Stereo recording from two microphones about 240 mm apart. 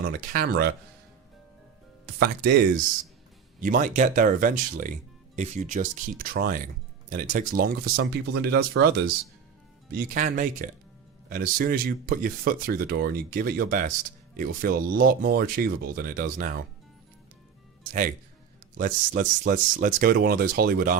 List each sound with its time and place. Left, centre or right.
0.0 s speech: right
2.1 s speech: right
9.9 s speech: right
18.8 s speech: right